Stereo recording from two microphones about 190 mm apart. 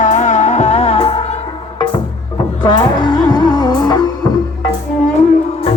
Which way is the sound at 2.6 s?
20° left (ahead or behind).